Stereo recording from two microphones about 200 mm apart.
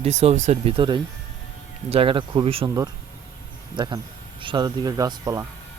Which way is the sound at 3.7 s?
20° right (ahead or behind).